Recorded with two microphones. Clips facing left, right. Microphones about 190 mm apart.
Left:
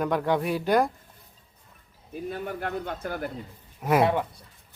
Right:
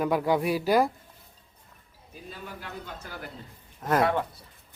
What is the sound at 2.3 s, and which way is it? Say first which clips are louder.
Speech: left 8 dB; 60° left (ahead or behind).